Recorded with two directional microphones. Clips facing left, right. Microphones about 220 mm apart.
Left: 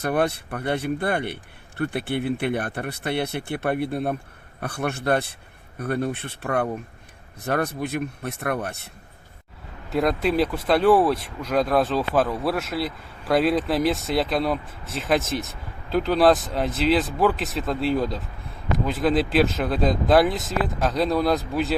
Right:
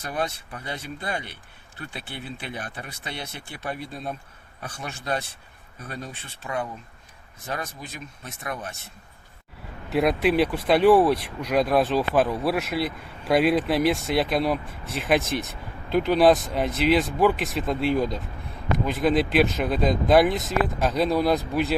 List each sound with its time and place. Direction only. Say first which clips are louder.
0.0 s speech: left 7 dB; 60° left (ahead or behind)
9.9 s speech: right 1 dB; 5° right (ahead or behind)